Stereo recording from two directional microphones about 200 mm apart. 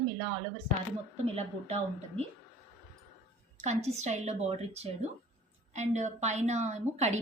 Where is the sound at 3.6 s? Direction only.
35° right (ahead or behind).